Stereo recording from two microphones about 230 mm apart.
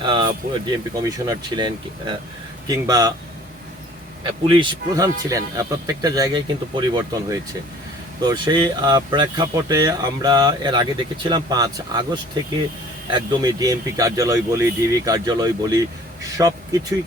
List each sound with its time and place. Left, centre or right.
0.0 s a sound: right
0.9 s speech: centre
4.2 s speech: right